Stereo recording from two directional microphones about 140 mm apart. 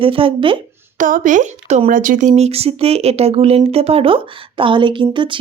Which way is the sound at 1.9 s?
75° right (ahead or behind).